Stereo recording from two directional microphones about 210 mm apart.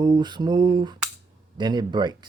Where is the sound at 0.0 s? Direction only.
20° right (ahead or behind).